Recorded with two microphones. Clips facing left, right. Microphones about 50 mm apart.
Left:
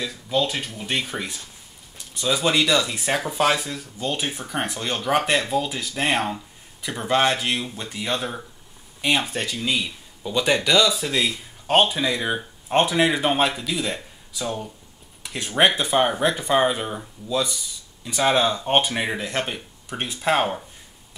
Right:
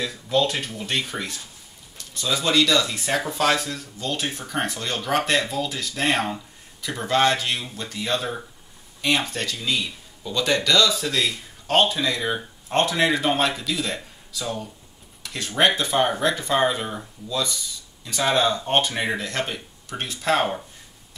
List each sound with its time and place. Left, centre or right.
0.0 s speech: centre